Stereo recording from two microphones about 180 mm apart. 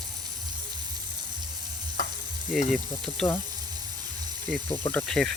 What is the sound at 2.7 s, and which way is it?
Speech, 5° left (ahead or behind).